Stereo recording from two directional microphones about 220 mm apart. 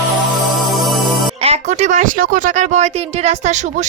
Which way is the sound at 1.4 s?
30° right (ahead or behind).